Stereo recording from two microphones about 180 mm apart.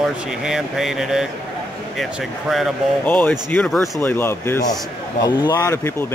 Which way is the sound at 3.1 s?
10° left (ahead or behind).